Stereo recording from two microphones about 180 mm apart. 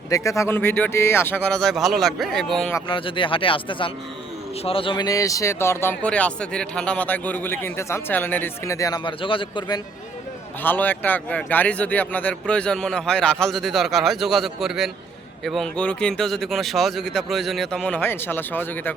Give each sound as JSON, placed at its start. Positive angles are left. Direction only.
{"t": 0.1, "sound": "speech", "side_deg": 15}
{"t": 2.8, "sound": "speech", "side_deg": 30}
{"t": 10.6, "sound": "a man's voice", "side_deg": 10}